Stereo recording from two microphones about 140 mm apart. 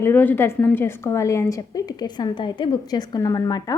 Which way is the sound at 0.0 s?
15° left (ahead or behind).